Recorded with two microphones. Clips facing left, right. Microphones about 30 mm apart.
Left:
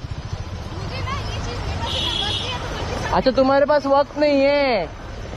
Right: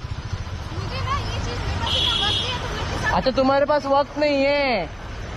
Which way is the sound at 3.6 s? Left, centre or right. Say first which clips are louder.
Left 3 dB; centre.